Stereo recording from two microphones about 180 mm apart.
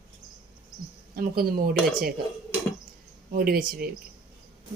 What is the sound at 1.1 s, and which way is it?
Speech, 50° right (ahead or behind).